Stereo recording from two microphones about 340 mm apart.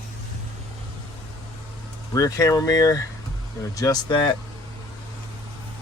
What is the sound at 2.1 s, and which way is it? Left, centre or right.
Speech, centre.